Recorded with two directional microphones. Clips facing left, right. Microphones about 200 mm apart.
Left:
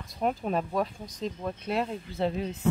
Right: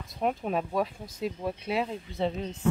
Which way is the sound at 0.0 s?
Centre (ahead or behind).